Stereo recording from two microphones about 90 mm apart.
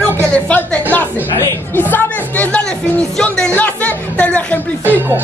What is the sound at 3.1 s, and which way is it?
Music, 10° left (ahead or behind).